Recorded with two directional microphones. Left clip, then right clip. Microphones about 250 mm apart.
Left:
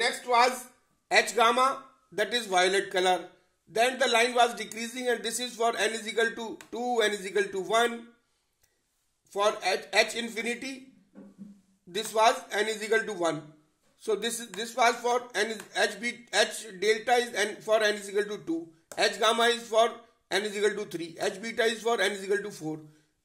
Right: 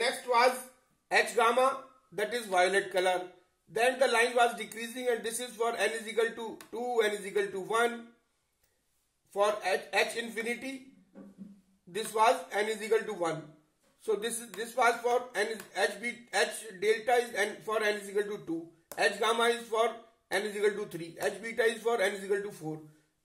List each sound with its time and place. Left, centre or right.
0.0 s a sound: left
1.1 s a man's voice: left
9.3 s a man's voice: left
11.9 s a man's voice: left